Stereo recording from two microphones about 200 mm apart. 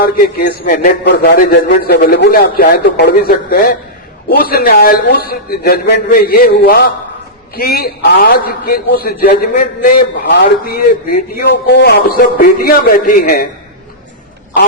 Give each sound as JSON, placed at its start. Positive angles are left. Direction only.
{"t": 0.0, "sound": "a man's voice", "side_deg": 50}